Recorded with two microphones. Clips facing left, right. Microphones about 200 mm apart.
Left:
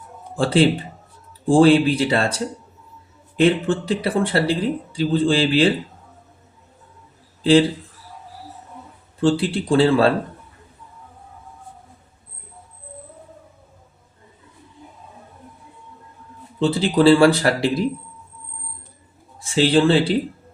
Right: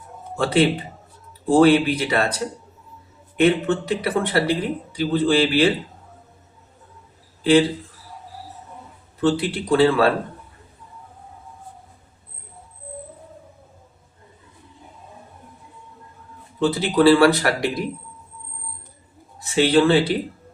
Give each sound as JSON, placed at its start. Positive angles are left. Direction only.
{"t": 0.3, "sound": "speech", "side_deg": 30}
{"t": 3.3, "sound": "speech", "side_deg": 30}
{"t": 9.2, "sound": "speech", "side_deg": 30}
{"t": 16.6, "sound": "speech", "side_deg": 30}
{"t": 19.5, "sound": "speech", "side_deg": 30}